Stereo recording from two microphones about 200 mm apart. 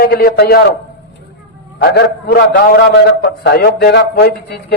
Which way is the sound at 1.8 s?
50° left (ahead or behind).